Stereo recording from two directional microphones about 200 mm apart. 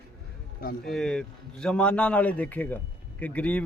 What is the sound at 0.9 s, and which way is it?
A man's voice, 5° left (ahead or behind).